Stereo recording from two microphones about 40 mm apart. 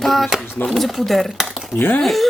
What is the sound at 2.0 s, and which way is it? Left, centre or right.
Speech, centre.